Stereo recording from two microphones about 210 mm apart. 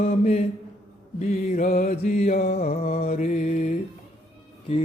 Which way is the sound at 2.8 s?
30° left (ahead or behind).